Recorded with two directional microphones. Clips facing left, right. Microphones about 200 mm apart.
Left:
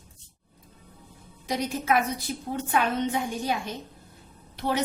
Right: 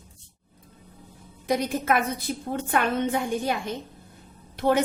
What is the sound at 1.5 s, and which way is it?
A woman's voice, 55° right (ahead or behind).